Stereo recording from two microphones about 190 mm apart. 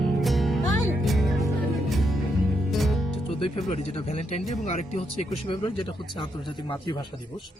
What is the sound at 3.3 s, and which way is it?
Music, 30° left (ahead or behind).